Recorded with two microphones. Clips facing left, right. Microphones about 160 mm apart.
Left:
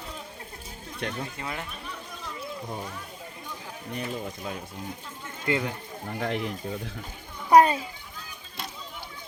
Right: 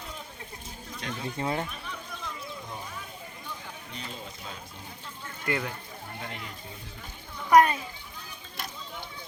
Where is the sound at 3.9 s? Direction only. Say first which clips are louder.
Left 10 dB; 55° left (ahead or behind).